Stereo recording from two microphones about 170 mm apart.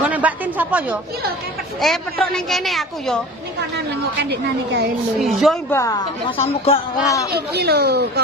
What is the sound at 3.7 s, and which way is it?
Speech, 80° right.